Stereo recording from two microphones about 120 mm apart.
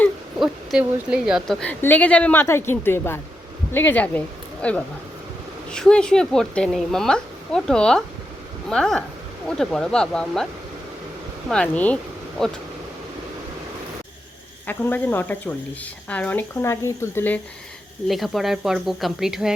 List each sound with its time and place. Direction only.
0.3 s speech: 5° right (ahead or behind)
1.5 s a woman's voice: 15° left (ahead or behind)
11.4 s a woman's voice: 10° left (ahead or behind)
14.7 s speech: 15° left (ahead or behind)
18.1 s a woman's voice: centre (ahead or behind)